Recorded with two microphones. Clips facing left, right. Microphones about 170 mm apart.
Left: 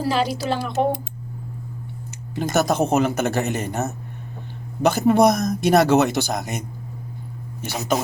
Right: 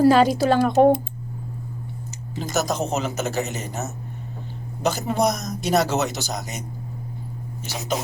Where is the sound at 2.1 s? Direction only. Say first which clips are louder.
Left 4 dB; 55° left (ahead or behind).